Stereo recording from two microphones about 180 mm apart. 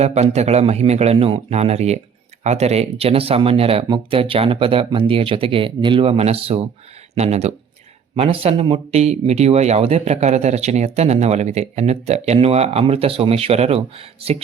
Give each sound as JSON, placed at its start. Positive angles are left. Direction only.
{"t": 0.0, "sound": "speech", "side_deg": -40}